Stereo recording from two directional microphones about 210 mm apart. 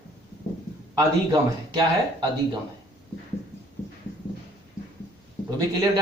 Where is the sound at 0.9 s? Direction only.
20° right (ahead or behind).